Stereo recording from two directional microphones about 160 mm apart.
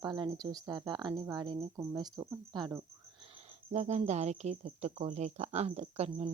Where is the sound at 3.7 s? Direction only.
45° right (ahead or behind).